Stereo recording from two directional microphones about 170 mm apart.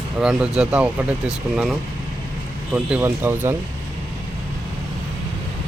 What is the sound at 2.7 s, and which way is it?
Speech, 10° right (ahead or behind).